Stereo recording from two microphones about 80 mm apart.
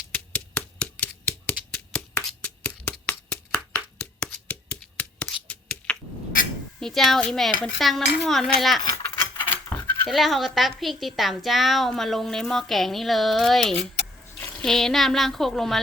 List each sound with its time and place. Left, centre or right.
0.1 s a sound: centre
6.7 s a child's voice: centre
9.0 s sheep: left
10.1 s a woman's voice: centre